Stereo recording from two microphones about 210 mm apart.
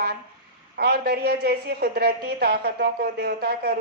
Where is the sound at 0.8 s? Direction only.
50° right (ahead or behind).